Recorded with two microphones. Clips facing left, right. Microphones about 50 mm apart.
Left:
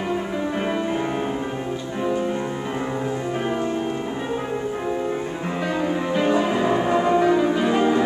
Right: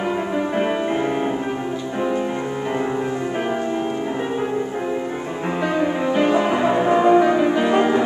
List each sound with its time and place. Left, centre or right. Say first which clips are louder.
5.8 s music: right 3 dB; right